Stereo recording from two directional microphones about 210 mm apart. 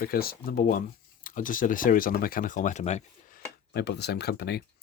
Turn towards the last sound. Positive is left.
turn(degrees=50)  # may be behind; listen again after turning